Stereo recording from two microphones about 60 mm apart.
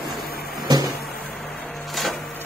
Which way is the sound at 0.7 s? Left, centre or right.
Right.